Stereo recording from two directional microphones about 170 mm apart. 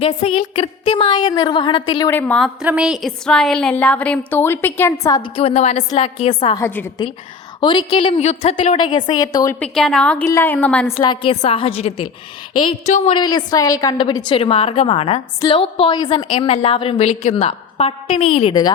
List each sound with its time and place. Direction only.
0.0 s a woman's voice: 35° left (ahead or behind)
2.0 s a woman's voice: 10° left (ahead or behind)
2.6 s a woman's voice: 5° right (ahead or behind); by 5.3 s 20° left (ahead or behind)
5.4 s a woman's voice: 35° left (ahead or behind)
6.6 s a woman's voice: 10° left (ahead or behind)
7.6 s a woman's voice: 30° left (ahead or behind)
9.6 s a woman's voice: 5° left (ahead or behind)
10.9 s a woman's voice: 30° left (ahead or behind)
13.1 s a woman's voice: 25° left (ahead or behind)